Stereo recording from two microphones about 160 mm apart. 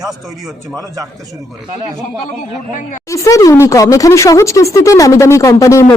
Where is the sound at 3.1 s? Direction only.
20° left (ahead or behind).